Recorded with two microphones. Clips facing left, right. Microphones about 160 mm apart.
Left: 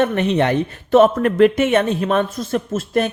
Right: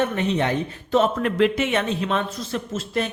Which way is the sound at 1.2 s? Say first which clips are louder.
Left 6 dB; 50° left (ahead or behind).